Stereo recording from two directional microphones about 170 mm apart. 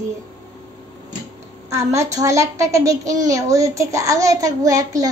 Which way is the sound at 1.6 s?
15° right (ahead or behind).